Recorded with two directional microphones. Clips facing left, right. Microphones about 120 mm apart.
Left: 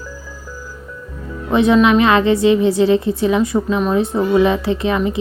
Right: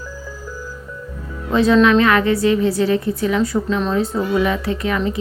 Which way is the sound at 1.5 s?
20° left (ahead or behind).